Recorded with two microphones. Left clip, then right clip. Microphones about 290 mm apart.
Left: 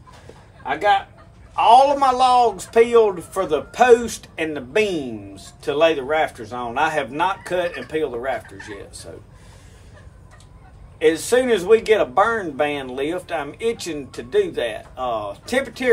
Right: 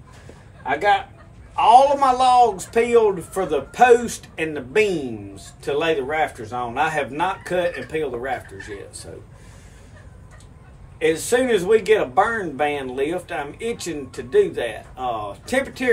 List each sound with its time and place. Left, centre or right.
0.7 s a man's voice: centre
11.0 s a man's voice: centre